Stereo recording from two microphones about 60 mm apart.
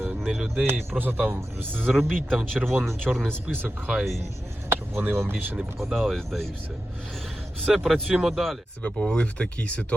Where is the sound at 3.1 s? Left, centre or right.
Centre.